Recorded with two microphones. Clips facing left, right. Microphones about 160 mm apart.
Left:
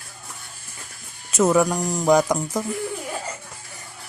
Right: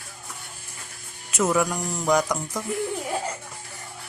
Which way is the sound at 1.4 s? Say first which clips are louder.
Left 5 dB; 30° left (ahead or behind).